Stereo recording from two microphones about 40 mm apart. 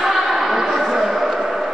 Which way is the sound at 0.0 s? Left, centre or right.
Centre.